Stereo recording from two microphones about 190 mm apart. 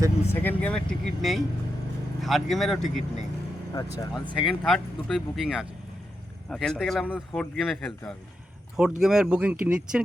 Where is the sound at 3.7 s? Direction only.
20° left (ahead or behind).